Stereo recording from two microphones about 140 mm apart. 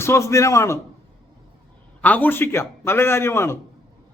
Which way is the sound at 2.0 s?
10° left (ahead or behind).